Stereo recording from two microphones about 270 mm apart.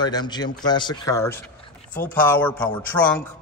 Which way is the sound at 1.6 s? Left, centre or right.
Left.